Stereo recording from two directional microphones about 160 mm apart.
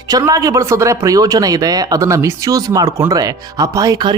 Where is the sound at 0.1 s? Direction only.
20° right (ahead or behind).